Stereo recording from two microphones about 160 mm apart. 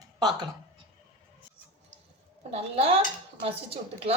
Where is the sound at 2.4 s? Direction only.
40° right (ahead or behind).